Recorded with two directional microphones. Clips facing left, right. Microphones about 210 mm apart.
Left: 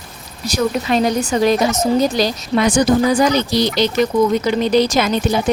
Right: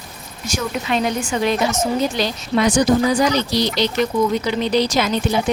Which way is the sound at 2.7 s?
50° left (ahead or behind).